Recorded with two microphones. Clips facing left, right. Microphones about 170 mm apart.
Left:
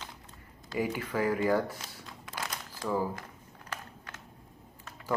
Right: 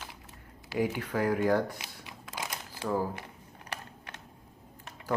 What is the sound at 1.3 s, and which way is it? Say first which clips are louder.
Speech: right 1 dB; 5° right (ahead or behind).